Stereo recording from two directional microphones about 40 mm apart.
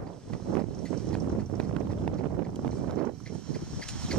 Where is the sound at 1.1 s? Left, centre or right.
Left.